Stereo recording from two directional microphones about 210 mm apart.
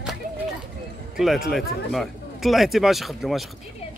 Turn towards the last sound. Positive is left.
turn(degrees=0)  # may be behind; listen again after turning